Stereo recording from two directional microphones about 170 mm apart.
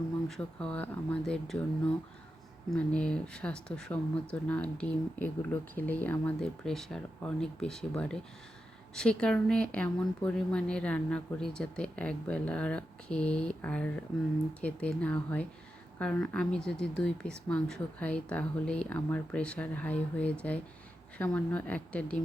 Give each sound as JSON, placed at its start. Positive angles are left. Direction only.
{"t": 0.3, "sound": "speech", "side_deg": 5}
{"t": 2.6, "sound": "speech", "side_deg": 5}